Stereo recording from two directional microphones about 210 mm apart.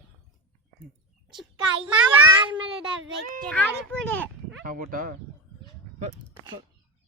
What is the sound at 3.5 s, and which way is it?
A child's voice, 5° left (ahead or behind).